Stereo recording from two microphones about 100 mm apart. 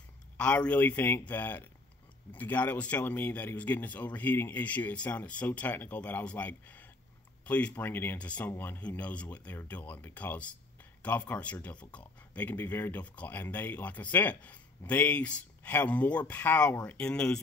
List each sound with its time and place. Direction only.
0.4 s speech: 10° left (ahead or behind)